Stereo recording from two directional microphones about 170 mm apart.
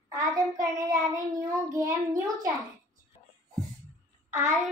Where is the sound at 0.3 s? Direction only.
20° right (ahead or behind).